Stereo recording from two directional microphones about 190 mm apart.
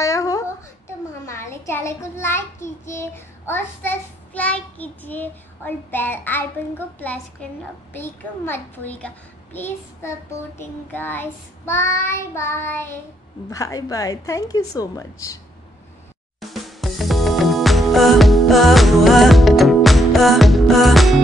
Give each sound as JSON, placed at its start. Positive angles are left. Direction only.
{"t": 0.0, "sound": "a child's voice", "side_deg": 15}
{"t": 7.4, "sound": "child singing", "side_deg": 5}
{"t": 16.3, "sound": "music", "side_deg": 0}